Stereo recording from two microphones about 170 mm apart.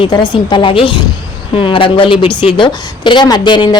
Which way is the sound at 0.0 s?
25° left (ahead or behind).